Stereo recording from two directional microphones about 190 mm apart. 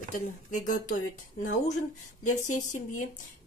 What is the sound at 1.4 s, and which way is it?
Speech, 40° left (ahead or behind).